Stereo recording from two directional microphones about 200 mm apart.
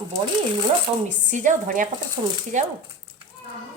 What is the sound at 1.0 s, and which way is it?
Speech, 35° right (ahead or behind).